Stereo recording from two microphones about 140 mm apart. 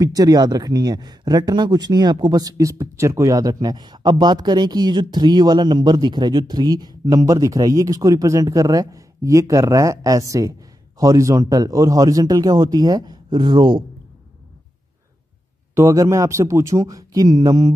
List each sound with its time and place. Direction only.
0.0 s speech: 25° right (ahead or behind)
15.7 s speech: 20° right (ahead or behind)